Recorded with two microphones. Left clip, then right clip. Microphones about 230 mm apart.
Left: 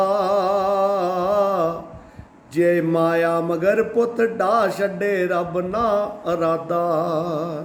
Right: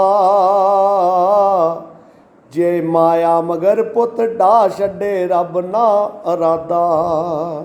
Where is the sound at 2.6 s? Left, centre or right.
Centre.